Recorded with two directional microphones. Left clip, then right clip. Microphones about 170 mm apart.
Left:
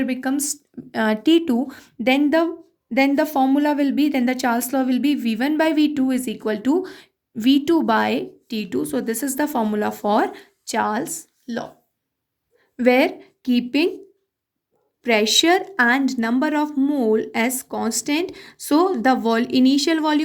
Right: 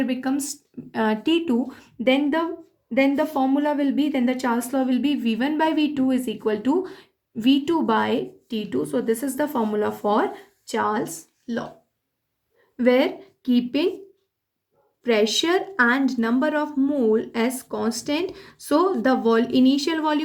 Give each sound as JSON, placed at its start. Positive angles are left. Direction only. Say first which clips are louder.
{"t": 0.0, "sound": "a woman's voice", "louder": "left 2 dB", "side_deg": 45}
{"t": 12.7, "sound": "speech", "louder": "left 2 dB", "side_deg": 50}
{"t": 15.0, "sound": "a woman's voice", "louder": "left 4 dB", "side_deg": 50}